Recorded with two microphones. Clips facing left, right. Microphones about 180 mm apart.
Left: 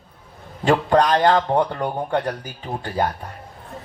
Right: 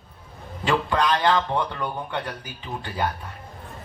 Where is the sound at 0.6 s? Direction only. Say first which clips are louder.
Left 6 dB; 45° left (ahead or behind).